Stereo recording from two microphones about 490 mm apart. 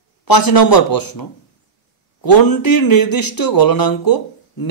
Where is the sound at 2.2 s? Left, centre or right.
Left.